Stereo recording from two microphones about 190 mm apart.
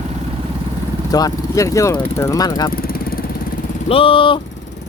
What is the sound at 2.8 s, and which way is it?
Vehicle, 50° left (ahead or behind).